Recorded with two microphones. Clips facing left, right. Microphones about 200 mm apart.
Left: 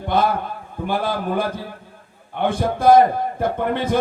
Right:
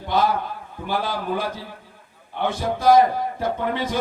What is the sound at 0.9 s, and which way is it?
A man's voice, 55° left (ahead or behind).